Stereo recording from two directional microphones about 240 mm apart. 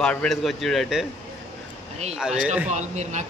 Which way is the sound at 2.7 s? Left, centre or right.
Right.